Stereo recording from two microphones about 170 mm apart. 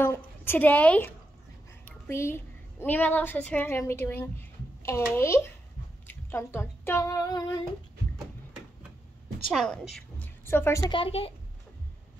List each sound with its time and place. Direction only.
0.0 s a woman's voice: 15° left (ahead or behind)
9.5 s a woman's voice: 5° left (ahead or behind)
10.9 s speech: 30° left (ahead or behind)